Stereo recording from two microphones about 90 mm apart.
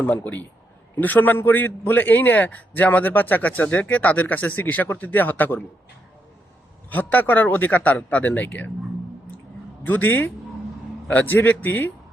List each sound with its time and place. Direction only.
0.0 s a man's voice: 20° left (ahead or behind)
6.9 s a man's voice: 20° left (ahead or behind)
9.8 s a man's voice: 20° left (ahead or behind)